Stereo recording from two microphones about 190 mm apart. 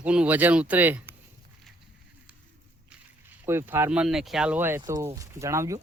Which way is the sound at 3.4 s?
10° right (ahead or behind).